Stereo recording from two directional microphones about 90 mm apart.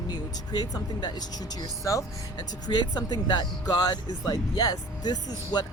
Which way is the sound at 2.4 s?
55° left (ahead or behind).